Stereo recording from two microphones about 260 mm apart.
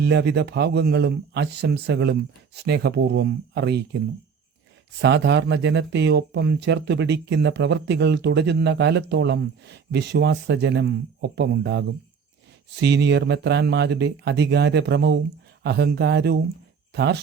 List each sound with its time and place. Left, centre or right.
0.0 s speech: right
4.9 s speech: right